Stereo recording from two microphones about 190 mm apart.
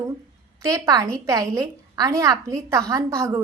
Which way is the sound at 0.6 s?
20° right (ahead or behind).